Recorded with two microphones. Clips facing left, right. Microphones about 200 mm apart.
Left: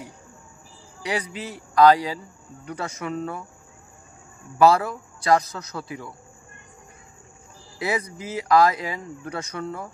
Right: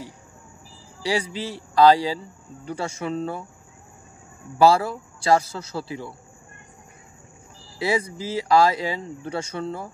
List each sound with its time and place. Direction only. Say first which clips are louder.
1.0 s speech: right 3 dB; 30° right (ahead or behind)
4.6 s speech: even; 30° right (ahead or behind)
7.8 s speech: right 3 dB; 30° right (ahead or behind)